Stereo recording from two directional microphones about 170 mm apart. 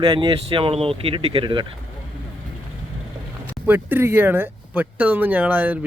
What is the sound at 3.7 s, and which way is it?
Speech, 10° right (ahead or behind).